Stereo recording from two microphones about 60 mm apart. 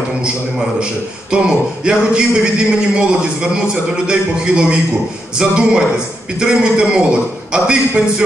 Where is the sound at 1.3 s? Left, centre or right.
Centre.